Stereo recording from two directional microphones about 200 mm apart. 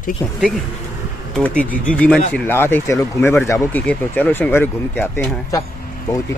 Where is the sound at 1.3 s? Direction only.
5° left (ahead or behind).